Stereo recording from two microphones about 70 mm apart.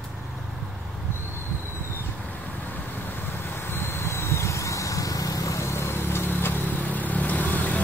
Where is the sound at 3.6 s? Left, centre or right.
Left.